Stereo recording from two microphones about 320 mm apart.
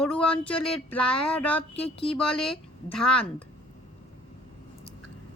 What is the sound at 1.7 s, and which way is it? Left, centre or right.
Speech, centre.